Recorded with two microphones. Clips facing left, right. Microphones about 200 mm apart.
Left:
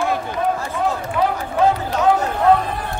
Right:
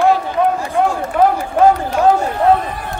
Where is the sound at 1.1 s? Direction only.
50° right (ahead or behind).